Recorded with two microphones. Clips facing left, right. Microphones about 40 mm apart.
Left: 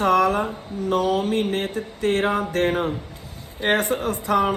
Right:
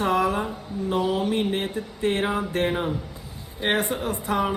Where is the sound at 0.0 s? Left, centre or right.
Left.